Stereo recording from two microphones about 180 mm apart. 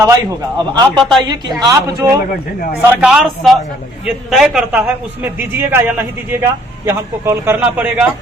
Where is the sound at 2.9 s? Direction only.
5° right (ahead or behind).